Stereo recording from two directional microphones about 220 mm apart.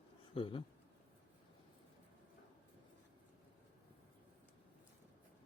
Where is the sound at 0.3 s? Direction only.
25° left (ahead or behind).